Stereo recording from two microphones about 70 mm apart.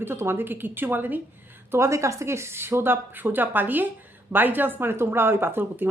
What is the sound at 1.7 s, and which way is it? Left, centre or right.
Speech, right.